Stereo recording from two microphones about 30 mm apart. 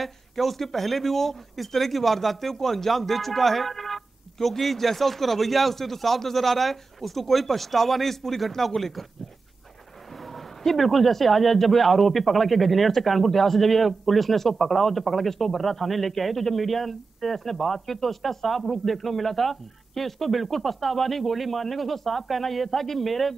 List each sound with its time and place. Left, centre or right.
0.0 s speech: centre
10.1 s speech: centre